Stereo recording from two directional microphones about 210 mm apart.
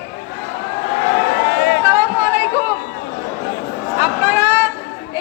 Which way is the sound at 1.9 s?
10° right (ahead or behind).